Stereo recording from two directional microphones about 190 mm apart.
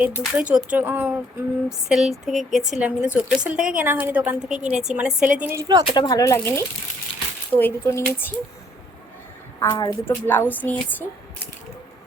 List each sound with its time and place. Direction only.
0.0 s a woman's voice: 5° right (ahead or behind)
5.8 s speech: 25° left (ahead or behind)
9.6 s speech: 20° left (ahead or behind)